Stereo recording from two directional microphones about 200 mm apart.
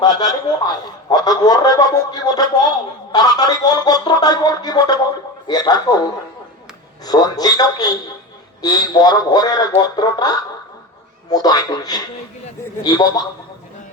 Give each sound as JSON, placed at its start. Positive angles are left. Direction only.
{"t": 0.0, "sound": "a man's voice", "side_deg": 20}